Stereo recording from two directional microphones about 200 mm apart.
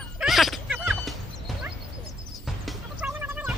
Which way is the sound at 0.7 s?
5° right (ahead or behind).